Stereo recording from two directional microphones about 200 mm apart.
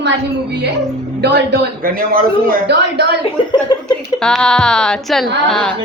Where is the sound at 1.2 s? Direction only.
55° right (ahead or behind).